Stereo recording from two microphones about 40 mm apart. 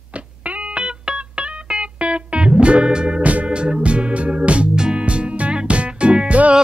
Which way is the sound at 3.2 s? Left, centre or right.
Right.